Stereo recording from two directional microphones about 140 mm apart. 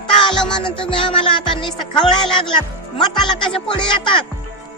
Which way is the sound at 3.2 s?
35° left (ahead or behind).